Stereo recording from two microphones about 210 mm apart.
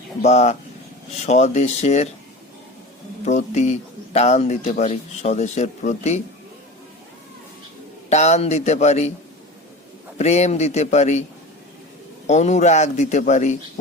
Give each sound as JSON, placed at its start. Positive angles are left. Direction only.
{"t": 0.2, "sound": "speech", "side_deg": 35}
{"t": 3.2, "sound": "speech", "side_deg": 35}
{"t": 8.1, "sound": "speech", "side_deg": 30}
{"t": 10.2, "sound": "speech", "side_deg": 30}
{"t": 12.3, "sound": "speech", "side_deg": 35}